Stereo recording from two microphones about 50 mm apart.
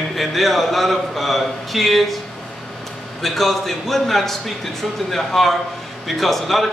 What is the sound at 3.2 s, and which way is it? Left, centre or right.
A man's voice, centre.